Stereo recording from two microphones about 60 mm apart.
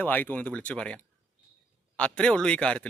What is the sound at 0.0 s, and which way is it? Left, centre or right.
Speech, left.